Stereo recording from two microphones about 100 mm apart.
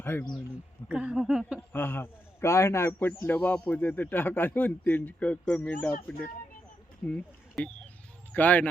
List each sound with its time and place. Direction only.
0.0 s speech: 20° left (ahead or behind)
0.9 s speech: 10° right (ahead or behind)
1.7 s a man's voice: 20° left (ahead or behind)
3.2 s a man's voice: 15° left (ahead or behind)